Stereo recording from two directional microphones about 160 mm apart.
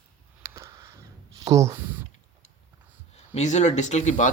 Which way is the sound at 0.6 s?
20° right (ahead or behind).